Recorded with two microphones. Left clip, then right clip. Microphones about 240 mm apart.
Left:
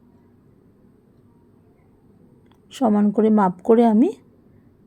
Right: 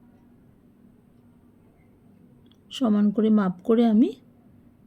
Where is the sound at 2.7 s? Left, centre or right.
Centre.